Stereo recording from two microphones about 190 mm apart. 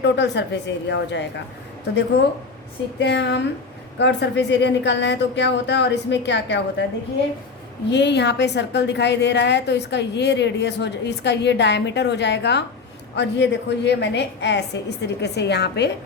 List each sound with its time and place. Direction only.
0.0 s a woman's voice: 65° left (ahead or behind)
7.9 s a woman's voice: 65° left (ahead or behind)